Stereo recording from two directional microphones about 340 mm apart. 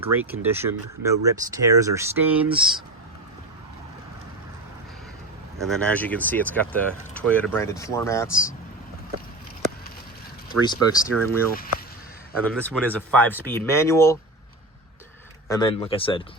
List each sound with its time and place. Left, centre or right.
0.0 s speech: centre
5.5 s speech: centre
10.7 s speech: centre
12.5 s speech: centre
15.4 s speech: centre